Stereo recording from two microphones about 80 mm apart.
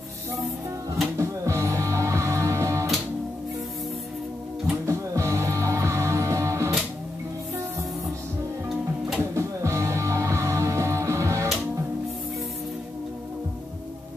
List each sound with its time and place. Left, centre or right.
1.1 s music: right
4.8 s music: right
9.2 s music: right